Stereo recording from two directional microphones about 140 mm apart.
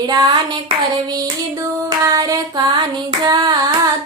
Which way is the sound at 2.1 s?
25° right (ahead or behind).